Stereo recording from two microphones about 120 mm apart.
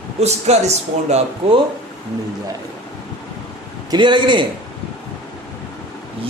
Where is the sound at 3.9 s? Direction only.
40° right (ahead or behind).